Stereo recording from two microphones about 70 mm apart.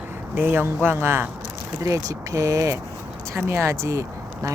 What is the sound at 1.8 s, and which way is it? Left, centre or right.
Speech, right.